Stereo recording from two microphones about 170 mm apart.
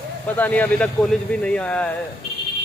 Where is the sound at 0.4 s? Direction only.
10° left (ahead or behind).